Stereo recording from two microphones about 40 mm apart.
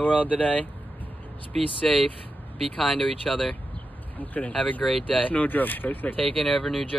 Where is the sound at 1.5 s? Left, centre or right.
Centre.